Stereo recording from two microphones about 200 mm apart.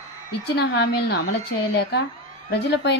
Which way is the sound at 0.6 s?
55° left (ahead or behind).